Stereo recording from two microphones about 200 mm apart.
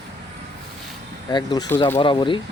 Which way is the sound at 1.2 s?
20° left (ahead or behind).